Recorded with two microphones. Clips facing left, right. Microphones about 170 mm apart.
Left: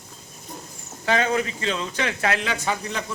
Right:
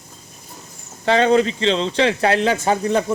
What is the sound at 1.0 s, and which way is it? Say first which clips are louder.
Speech: right 7 dB; 30° right (ahead or behind).